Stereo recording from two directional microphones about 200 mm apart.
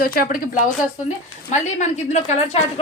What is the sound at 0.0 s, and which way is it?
Speech, 45° left (ahead or behind).